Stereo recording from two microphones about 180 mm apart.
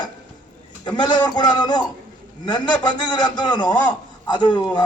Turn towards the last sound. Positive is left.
turn(degrees=25)  # may be behind; listen again after turning